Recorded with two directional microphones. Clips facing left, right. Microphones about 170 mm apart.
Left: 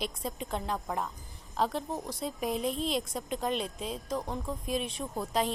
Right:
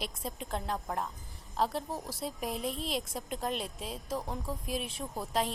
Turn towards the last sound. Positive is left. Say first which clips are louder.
# left 2 dB
turn(degrees=0)  # may be behind; listen again after turning